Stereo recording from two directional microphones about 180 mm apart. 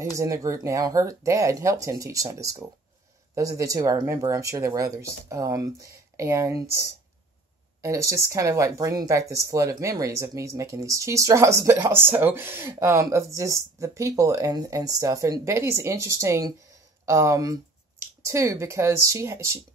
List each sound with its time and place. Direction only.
0.2 s speech: 20° right (ahead or behind)